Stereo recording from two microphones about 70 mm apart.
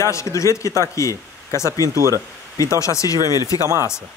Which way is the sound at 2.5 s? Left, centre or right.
Left.